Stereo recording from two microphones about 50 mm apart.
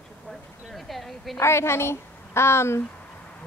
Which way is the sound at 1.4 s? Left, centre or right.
Left.